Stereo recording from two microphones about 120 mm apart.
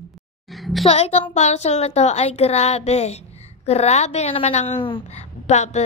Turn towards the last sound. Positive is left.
turn(degrees=70)  # may be behind; listen again after turning